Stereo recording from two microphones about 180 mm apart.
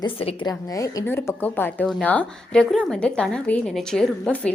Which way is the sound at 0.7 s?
20° left (ahead or behind).